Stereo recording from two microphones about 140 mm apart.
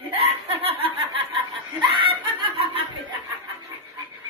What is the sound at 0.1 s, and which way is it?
Laughter, 45° right (ahead or behind).